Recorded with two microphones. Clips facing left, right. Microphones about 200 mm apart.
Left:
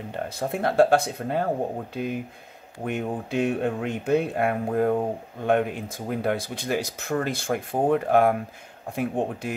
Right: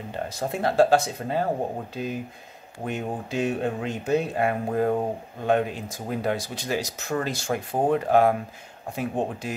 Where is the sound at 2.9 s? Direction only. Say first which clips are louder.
Left 2 dB; 55° left (ahead or behind).